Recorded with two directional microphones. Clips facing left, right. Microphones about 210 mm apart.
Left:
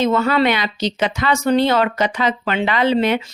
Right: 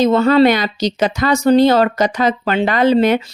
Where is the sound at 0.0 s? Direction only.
35° right (ahead or behind).